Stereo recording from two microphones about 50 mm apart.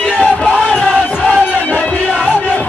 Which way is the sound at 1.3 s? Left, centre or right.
Left.